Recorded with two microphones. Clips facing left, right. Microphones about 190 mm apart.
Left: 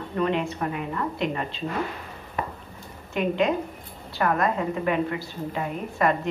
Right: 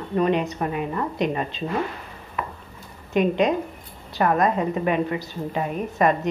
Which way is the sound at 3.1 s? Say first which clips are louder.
Right 3 dB; 20° right (ahead or behind).